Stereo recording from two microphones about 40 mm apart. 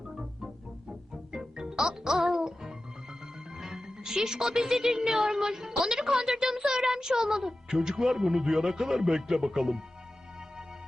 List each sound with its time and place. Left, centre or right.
1.3 s music: centre